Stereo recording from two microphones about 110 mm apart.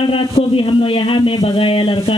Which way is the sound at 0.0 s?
55° left (ahead or behind).